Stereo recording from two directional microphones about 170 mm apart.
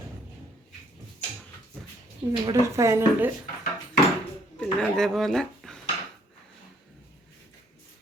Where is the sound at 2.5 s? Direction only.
15° right (ahead or behind).